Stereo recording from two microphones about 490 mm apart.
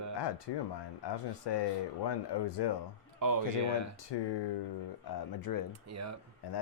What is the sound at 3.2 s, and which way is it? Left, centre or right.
Speech, right.